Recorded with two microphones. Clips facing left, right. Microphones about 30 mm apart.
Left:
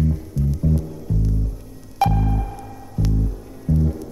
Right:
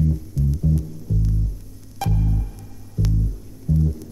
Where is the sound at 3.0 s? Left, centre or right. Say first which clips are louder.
Left 2 dB; left.